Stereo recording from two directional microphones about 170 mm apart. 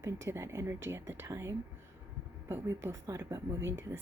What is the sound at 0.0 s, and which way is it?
A woman's voice, 15° right (ahead or behind).